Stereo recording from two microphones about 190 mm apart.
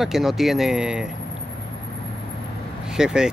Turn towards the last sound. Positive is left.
turn(degrees=-5)  # may be behind; listen again after turning